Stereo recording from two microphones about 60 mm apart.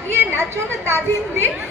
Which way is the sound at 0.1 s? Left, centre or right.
Right.